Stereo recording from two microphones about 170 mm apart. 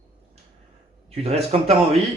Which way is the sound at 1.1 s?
35° right (ahead or behind).